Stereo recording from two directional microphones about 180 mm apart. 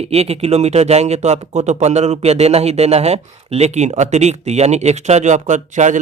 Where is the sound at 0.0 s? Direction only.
35° right (ahead or behind).